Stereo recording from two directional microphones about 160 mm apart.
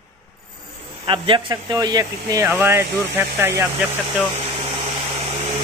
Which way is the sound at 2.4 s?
15° right (ahead or behind).